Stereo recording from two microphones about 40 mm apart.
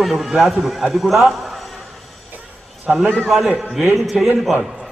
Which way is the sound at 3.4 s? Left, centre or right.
Right.